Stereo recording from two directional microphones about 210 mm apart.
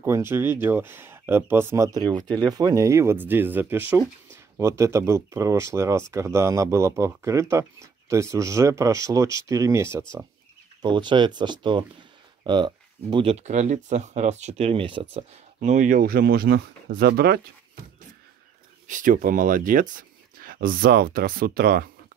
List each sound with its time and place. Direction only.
0.0 s speech: 10° right (ahead or behind)
15.1 s speech: 35° right (ahead or behind)
18.9 s speech: 40° right (ahead or behind)